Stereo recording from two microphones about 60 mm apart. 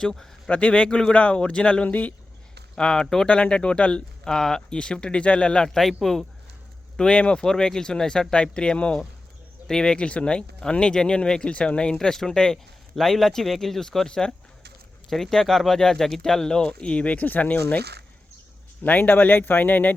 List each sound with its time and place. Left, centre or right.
0.0 s speech: centre
0.5 s speech: left
2.7 s speech: centre
3.2 s speech: centre
6.9 s speech: centre
18.8 s speech: left